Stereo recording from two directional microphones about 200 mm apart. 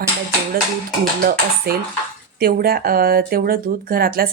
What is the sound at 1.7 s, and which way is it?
Speech, 50° right (ahead or behind).